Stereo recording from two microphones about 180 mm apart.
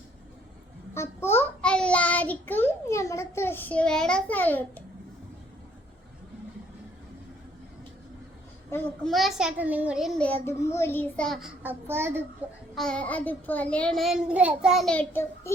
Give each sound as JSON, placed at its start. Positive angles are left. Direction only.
{"t": 0.9, "sound": "a child's voice", "side_deg": 15}
{"t": 9.0, "sound": "a child's voice", "side_deg": 0}
{"t": 10.2, "sound": "child singing", "side_deg": 10}
{"t": 12.7, "sound": "a child's voice", "side_deg": 5}